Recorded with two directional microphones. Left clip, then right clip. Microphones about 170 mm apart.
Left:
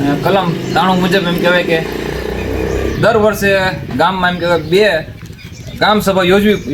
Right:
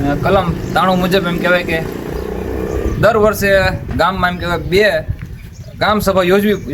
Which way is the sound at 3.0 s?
10° right (ahead or behind).